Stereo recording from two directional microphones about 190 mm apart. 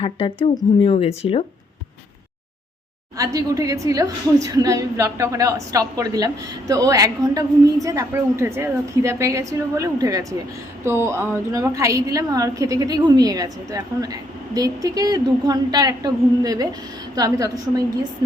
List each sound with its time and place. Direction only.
0.0 s speech: 25° left (ahead or behind)
3.2 s a woman's voice: 15° right (ahead or behind)